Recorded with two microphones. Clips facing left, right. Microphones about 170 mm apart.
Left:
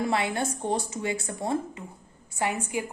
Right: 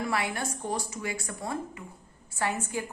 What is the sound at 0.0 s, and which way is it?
A woman's voice, 25° left (ahead or behind).